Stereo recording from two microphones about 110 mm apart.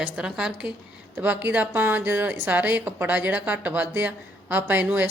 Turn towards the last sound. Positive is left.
turn(degrees=-15)  # may be behind; listen again after turning